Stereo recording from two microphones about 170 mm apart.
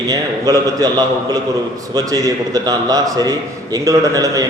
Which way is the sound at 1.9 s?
20° right (ahead or behind).